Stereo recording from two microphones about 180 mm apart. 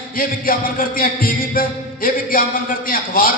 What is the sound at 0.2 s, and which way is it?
Music, 50° left (ahead or behind).